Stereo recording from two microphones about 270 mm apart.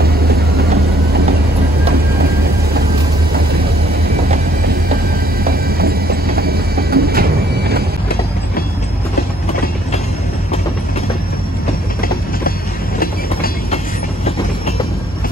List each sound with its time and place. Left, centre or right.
5.4 s train: right
13.0 s train: left